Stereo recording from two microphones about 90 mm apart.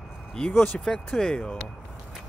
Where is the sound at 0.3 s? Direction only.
5° left (ahead or behind).